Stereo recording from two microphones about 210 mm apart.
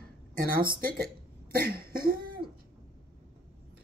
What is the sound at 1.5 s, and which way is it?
Cough, 45° right (ahead or behind).